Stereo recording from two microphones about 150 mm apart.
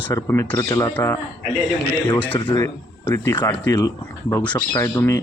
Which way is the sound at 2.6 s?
15° left (ahead or behind).